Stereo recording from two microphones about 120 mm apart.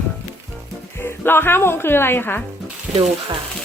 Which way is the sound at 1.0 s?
20° left (ahead or behind).